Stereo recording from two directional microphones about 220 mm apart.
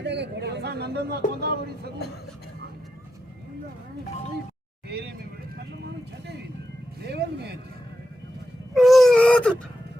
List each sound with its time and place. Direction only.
0.0 s speech: 50° right (ahead or behind)
4.9 s speech: 45° right (ahead or behind)
7.0 s speech: 50° right (ahead or behind)
8.7 s whimper: centre (ahead or behind)